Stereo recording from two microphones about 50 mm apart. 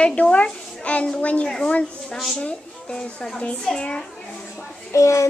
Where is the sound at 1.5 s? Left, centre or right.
Centre.